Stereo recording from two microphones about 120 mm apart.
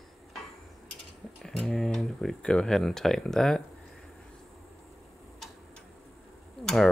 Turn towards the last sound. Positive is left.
turn(degrees=5)  # may be behind; listen again after turning